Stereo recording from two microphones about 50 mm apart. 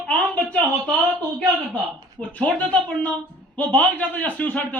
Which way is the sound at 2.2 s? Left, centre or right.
Left.